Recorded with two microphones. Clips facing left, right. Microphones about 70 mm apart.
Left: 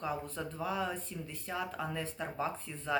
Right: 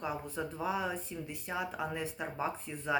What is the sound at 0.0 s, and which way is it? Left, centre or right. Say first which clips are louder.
Speech: even; centre.